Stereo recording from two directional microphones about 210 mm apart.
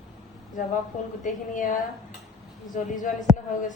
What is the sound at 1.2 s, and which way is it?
A woman's voice, 40° left (ahead or behind).